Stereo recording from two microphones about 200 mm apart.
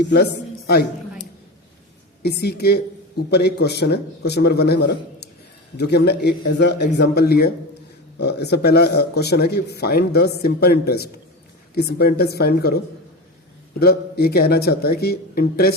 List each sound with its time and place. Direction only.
0.0 s a man's voice: 55° left (ahead or behind)
2.2 s a man's voice: 55° left (ahead or behind)